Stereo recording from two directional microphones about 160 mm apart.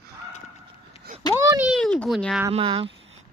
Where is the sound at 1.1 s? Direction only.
60° right (ahead or behind).